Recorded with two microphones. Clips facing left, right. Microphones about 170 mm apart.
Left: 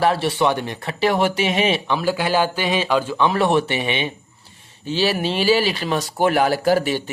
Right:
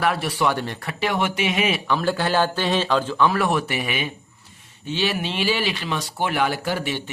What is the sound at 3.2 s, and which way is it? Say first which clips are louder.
Speech: left 6 dB; 30° left (ahead or behind).